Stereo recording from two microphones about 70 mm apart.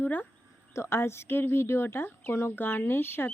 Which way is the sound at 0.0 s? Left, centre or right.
Left.